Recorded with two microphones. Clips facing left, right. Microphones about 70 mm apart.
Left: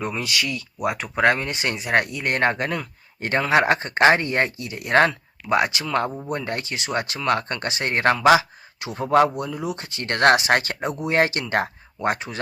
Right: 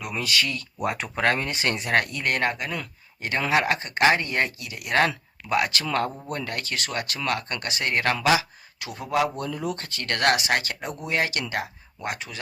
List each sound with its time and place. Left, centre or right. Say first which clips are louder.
0.2 s speech: even; centre
1.2 s speech: left 4 dB; centre
1.7 s speech: left 2 dB; centre
2.2 s speech: left 4 dB; left
9.0 s speech: left 7 dB; left
9.3 s speech: left 2 dB; centre
9.7 s speech: left 3 dB; left